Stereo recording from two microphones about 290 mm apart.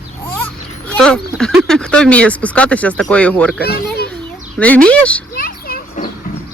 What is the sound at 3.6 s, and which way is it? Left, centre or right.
Children playing, left.